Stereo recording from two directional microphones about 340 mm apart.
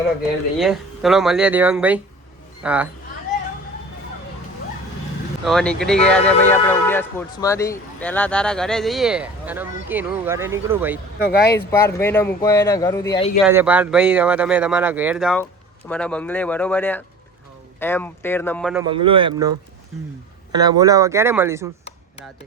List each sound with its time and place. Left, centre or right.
0.6 s speech: centre
5.5 s speech: centre
11.3 s speech: left
11.5 s speech: centre
13.4 s speech: centre
18.9 s speech: centre